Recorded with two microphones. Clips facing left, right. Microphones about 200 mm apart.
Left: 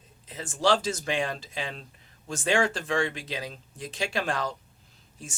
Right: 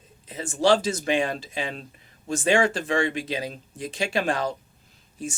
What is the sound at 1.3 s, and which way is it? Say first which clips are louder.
Speech: right 4 dB; 15° right (ahead or behind).